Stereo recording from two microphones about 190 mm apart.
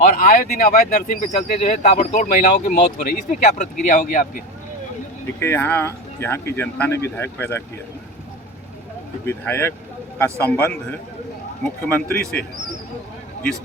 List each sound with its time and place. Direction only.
0.0 s speech: 45° left (ahead or behind)
5.2 s speech: 10° left (ahead or behind)
9.2 s speech: 10° left (ahead or behind)
11.9 s speech: 10° left (ahead or behind)